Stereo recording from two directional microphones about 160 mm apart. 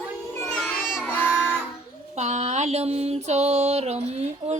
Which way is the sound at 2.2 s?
45° right (ahead or behind).